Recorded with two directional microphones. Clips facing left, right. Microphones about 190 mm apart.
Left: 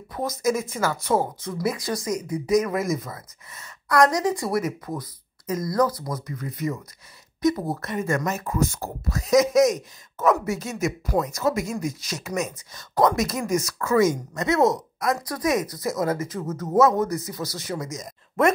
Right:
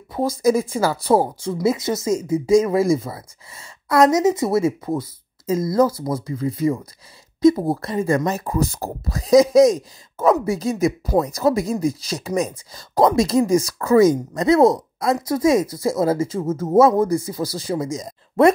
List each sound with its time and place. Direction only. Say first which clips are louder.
0.1 s speech: right 6 dB; 30° right (ahead or behind)